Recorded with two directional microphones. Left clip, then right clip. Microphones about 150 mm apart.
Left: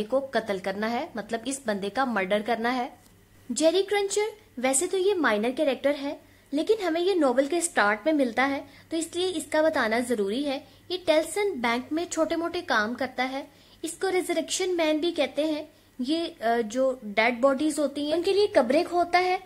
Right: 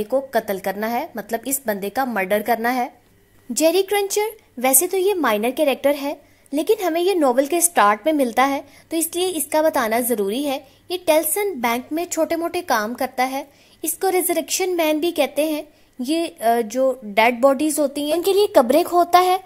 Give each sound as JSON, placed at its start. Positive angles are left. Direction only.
{"t": 0.1, "sound": "a woman's voice", "side_deg": -30}